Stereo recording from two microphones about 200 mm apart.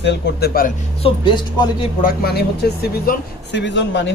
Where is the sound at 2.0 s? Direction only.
50° left (ahead or behind).